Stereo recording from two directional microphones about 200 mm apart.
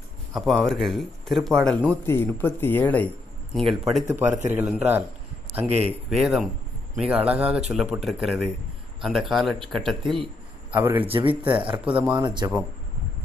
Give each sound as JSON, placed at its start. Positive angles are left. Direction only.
{"t": 0.3, "sound": "speech", "side_deg": 0}
{"t": 3.9, "sound": "a man's voice", "side_deg": -5}
{"t": 5.7, "sound": "a man's voice", "side_deg": -30}
{"t": 6.0, "sound": "speech", "side_deg": 0}
{"t": 10.7, "sound": "a man's voice", "side_deg": -10}
{"t": 11.1, "sound": "speech", "side_deg": -25}
{"t": 11.6, "sound": "a man's voice", "side_deg": -5}
{"t": 12.1, "sound": "speech", "side_deg": -20}